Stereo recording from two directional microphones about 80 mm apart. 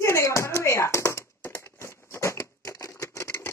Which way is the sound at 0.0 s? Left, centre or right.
Left.